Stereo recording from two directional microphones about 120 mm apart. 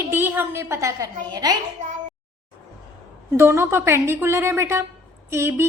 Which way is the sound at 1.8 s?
90° right.